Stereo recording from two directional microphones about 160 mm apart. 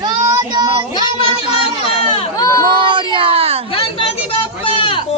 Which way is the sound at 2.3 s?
20° left (ahead or behind).